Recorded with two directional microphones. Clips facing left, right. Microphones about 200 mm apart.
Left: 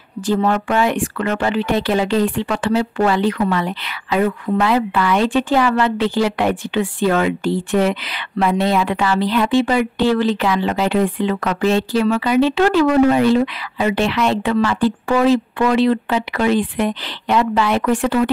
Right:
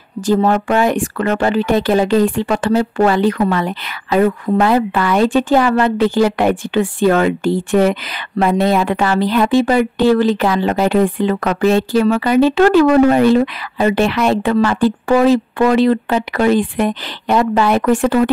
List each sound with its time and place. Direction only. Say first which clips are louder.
0.3 s speech: right 3 dB; 40° right (ahead or behind)